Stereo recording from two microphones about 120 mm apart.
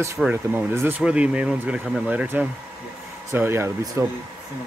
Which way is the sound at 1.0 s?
10° right (ahead or behind).